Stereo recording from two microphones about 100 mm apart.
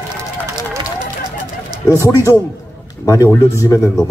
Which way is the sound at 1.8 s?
30° left (ahead or behind).